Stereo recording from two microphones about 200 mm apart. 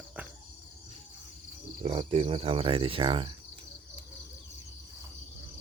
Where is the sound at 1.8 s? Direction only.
30° right (ahead or behind).